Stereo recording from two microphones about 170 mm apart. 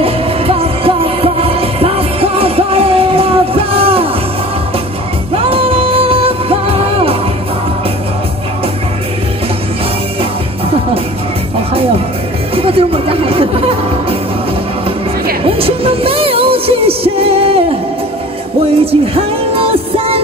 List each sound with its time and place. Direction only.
0.0 s music: 35° right (ahead or behind)
5.3 s music: 35° right (ahead or behind)
12.5 s chatter: 35° right (ahead or behind)
15.4 s music: 35° right (ahead or behind)
18.9 s music: 35° right (ahead or behind)